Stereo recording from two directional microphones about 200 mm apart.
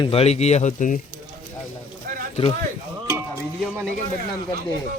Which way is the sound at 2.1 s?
45° right (ahead or behind).